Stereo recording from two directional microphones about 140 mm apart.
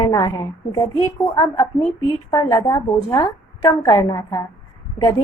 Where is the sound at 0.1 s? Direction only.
25° left (ahead or behind).